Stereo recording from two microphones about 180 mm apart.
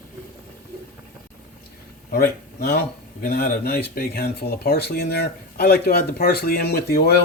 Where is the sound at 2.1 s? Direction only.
60° left (ahead or behind).